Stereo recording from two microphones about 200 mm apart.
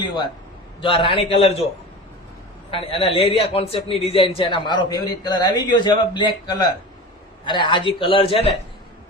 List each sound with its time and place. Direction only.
0.8 s a man's voice: 25° left (ahead or behind)
2.6 s a man's voice: 25° left (ahead or behind)